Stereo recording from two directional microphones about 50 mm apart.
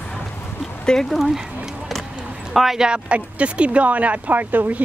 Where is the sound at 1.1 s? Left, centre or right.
Centre.